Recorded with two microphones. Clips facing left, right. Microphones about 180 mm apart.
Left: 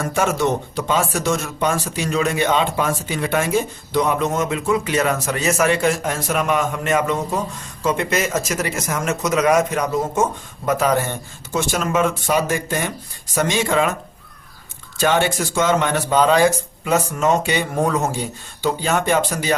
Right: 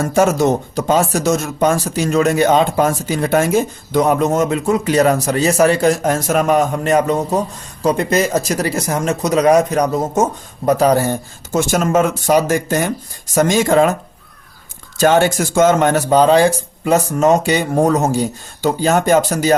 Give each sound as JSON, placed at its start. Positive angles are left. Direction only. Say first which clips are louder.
{"t": 0.0, "sound": "speech", "louder": "right 6 dB", "side_deg": -40}
{"t": 14.9, "sound": "speech", "louder": "right 5 dB", "side_deg": -40}